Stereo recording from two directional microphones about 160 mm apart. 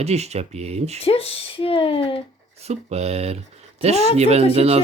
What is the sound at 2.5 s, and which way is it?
Speech, 40° right (ahead or behind).